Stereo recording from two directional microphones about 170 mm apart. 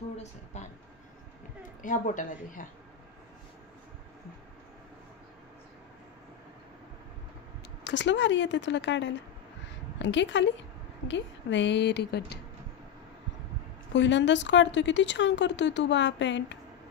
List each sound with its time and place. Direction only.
0.2 s a woman's voice: 40° left (ahead or behind)
1.8 s speech: 50° left (ahead or behind)
7.8 s a woman's voice: 90° left; by 12.4 s 75° left (ahead or behind)
13.9 s a woman's voice: 90° left